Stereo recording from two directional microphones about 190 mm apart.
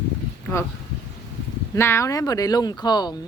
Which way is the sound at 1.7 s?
15° left (ahead or behind).